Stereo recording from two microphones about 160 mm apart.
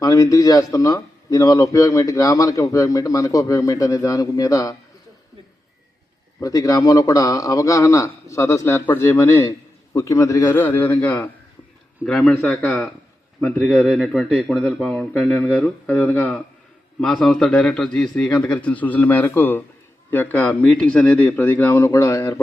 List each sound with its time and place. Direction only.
0.0 s a man's voice: 20° left (ahead or behind)
6.4 s a man's voice: 20° left (ahead or behind)